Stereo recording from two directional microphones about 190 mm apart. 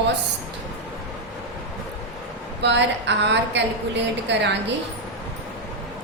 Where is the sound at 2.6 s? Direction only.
65° right (ahead or behind).